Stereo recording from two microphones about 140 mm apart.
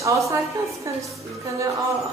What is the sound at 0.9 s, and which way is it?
Speech, 20° right (ahead or behind).